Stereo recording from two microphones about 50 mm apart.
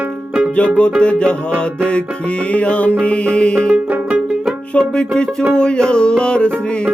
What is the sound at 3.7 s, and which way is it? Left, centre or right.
Music, right.